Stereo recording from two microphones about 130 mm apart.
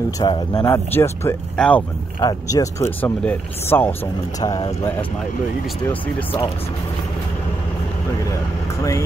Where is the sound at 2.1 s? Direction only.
30° left (ahead or behind).